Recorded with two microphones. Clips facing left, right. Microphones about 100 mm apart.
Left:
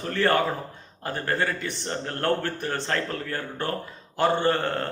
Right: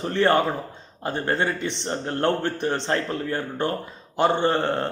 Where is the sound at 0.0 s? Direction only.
25° right (ahead or behind).